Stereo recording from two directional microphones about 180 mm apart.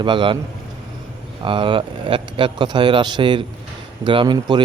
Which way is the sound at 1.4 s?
30° right (ahead or behind).